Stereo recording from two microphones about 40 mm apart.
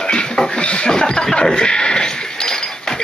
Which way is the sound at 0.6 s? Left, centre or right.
Left.